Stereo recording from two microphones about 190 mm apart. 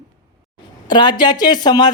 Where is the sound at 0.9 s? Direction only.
25° left (ahead or behind).